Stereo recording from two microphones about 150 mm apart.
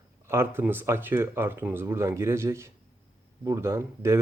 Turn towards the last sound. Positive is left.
turn(degrees=-15)  # may be behind; listen again after turning